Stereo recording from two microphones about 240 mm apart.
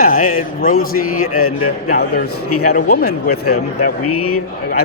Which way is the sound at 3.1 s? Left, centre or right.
Left.